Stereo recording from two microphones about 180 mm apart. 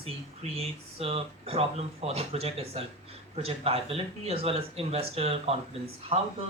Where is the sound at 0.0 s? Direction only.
35° right (ahead or behind).